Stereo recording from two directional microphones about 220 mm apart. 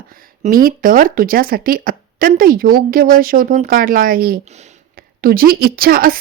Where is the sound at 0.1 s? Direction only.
40° right (ahead or behind).